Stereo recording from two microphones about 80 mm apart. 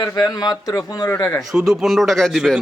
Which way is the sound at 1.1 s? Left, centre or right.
Left.